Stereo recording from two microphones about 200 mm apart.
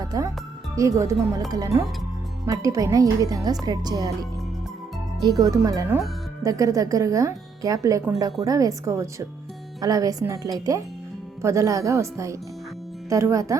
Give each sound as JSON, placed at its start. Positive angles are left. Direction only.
{"t": 0.0, "sound": "music", "side_deg": -20}
{"t": 0.8, "sound": "speech", "side_deg": -15}